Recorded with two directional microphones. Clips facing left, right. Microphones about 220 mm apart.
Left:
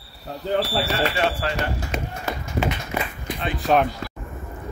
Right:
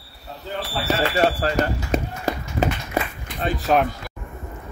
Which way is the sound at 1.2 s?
40° right (ahead or behind).